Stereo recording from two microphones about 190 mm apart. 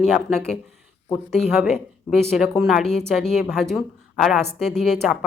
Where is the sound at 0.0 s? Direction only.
Centre (ahead or behind).